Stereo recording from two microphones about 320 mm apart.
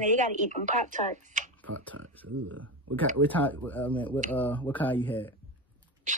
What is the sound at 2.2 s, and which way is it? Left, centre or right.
Speech, right.